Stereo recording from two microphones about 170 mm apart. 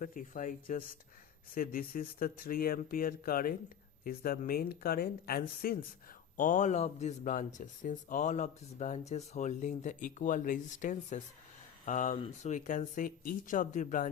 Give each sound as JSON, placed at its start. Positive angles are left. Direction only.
{"t": 0.0, "sound": "speech", "side_deg": 50}
{"t": 6.3, "sound": "speech", "side_deg": 50}